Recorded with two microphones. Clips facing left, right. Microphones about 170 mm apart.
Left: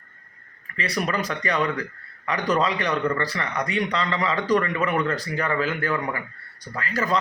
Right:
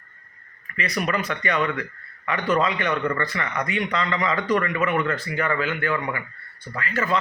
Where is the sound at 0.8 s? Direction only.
30° left (ahead or behind).